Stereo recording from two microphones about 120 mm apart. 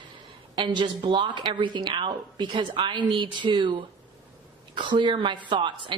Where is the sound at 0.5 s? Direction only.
40° right (ahead or behind).